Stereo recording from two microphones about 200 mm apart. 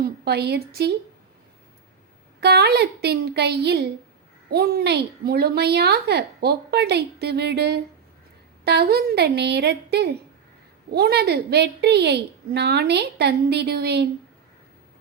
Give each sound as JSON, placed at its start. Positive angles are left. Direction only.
{"t": 0.0, "sound": "a woman's voice", "side_deg": -55}
{"t": 2.4, "sound": "a woman's voice", "side_deg": -55}